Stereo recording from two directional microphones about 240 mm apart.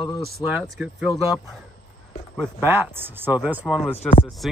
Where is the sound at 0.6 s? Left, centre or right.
Centre.